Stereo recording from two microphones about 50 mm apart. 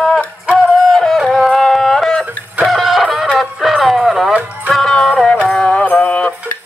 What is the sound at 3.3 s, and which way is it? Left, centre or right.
Music, centre.